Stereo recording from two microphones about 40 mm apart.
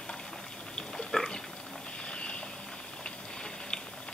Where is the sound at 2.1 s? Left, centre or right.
Left.